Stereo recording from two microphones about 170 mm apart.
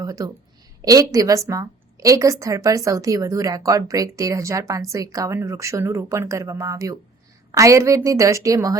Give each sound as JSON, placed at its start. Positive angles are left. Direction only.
{"t": 0.0, "sound": "a woman's voice", "side_deg": -20}